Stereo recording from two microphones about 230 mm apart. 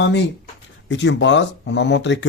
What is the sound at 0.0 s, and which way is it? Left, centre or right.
Speech, left.